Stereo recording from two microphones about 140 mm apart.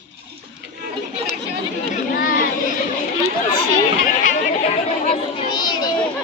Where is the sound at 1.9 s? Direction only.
90° left.